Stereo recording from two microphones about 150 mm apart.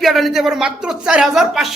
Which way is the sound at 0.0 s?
Centre (ahead or behind).